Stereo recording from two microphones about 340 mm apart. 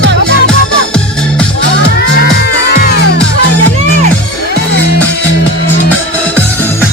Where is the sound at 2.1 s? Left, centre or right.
Left.